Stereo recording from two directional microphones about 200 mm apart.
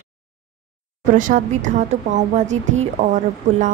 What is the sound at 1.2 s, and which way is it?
A woman's voice, 40° right (ahead or behind).